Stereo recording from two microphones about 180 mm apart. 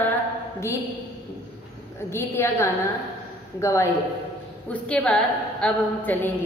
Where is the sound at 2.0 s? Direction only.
15° left (ahead or behind).